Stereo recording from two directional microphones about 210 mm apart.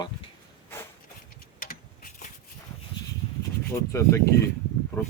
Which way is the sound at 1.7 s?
40° left (ahead or behind).